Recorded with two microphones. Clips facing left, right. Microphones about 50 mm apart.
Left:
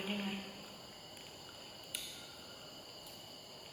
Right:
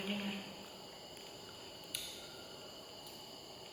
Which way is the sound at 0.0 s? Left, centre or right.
Centre.